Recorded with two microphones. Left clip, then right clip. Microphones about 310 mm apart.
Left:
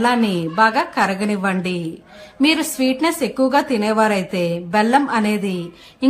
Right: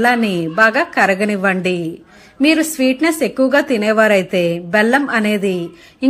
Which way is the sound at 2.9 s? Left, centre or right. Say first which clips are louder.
Right 3 dB; centre.